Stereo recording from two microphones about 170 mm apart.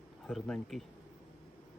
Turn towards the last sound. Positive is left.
turn(degrees=5)  # may be behind; listen again after turning